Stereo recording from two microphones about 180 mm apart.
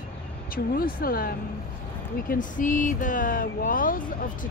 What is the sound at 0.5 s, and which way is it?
Speech, 55° left (ahead or behind).